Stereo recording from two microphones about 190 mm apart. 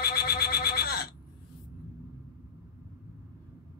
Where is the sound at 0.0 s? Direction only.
55° left (ahead or behind).